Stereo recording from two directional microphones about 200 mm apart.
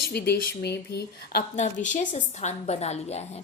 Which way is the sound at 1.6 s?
35° left (ahead or behind).